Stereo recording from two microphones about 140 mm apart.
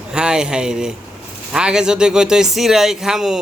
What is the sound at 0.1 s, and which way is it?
Speech, 5° right (ahead or behind).